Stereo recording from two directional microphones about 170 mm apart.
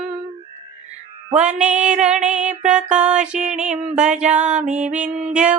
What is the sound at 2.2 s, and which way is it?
Music, 45° right (ahead or behind).